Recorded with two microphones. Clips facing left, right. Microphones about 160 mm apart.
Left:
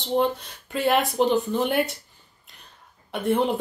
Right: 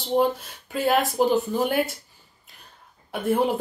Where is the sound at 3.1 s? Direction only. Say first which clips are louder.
Even; centre (ahead or behind).